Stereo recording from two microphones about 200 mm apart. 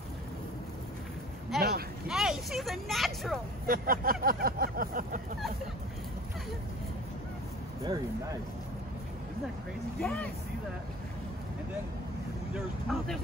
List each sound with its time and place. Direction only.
1.5 s a sound: centre (ahead or behind)
2.0 s vehicle: centre (ahead or behind)
3.6 s a sound: 45° right (ahead or behind)
7.8 s speech: 20° right (ahead or behind)
9.9 s speech: 5° left (ahead or behind)
12.5 s speech: centre (ahead or behind)